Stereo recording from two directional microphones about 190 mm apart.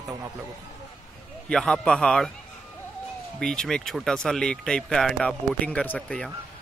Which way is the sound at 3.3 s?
5° left (ahead or behind).